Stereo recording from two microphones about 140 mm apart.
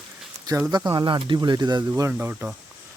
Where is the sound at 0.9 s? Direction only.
35° right (ahead or behind).